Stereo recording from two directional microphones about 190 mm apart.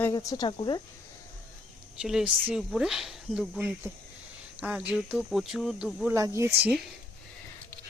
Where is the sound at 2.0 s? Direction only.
5° right (ahead or behind).